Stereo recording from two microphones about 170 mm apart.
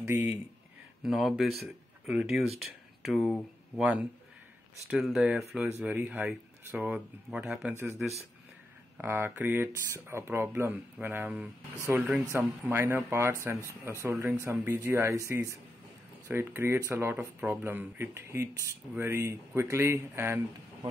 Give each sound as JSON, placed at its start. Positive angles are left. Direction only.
{"t": 0.0, "sound": "speech", "side_deg": -10}
{"t": 1.0, "sound": "speech", "side_deg": 0}
{"t": 9.0, "sound": "speech", "side_deg": -15}